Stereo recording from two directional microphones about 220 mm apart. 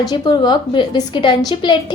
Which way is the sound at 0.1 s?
20° left (ahead or behind).